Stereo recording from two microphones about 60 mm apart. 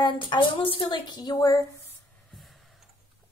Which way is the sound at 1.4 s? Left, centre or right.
Left.